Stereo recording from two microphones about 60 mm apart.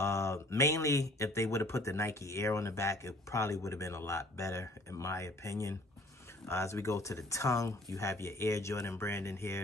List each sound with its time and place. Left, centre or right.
0.0 s speech: left